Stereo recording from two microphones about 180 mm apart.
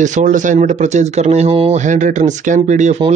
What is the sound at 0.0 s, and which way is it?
A man's voice, 45° right (ahead or behind).